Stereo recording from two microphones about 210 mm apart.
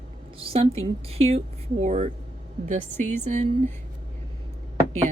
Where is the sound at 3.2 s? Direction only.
35° right (ahead or behind).